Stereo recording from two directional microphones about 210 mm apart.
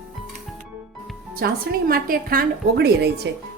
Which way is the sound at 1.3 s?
45° right (ahead or behind).